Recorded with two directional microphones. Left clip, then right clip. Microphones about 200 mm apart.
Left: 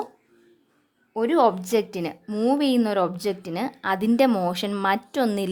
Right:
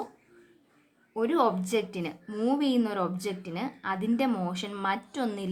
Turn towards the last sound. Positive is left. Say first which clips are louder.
# left 9 dB
turn(degrees=40)  # may be behind; listen again after turning